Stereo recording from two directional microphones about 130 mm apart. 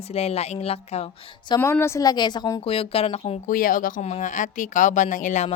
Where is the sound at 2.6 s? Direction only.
45° left (ahead or behind).